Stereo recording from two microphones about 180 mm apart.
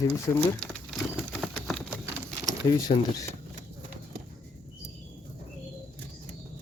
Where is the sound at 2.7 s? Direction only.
20° left (ahead or behind).